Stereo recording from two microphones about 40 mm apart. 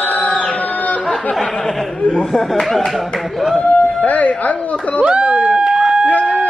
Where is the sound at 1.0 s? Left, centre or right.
Centre.